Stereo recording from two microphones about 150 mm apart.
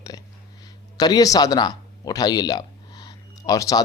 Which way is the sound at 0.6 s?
25° left (ahead or behind).